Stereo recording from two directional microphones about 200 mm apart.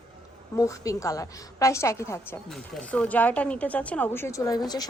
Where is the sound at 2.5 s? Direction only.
5° left (ahead or behind).